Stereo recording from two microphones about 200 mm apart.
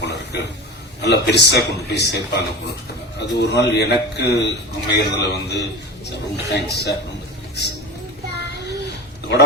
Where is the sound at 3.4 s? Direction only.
55° left (ahead or behind).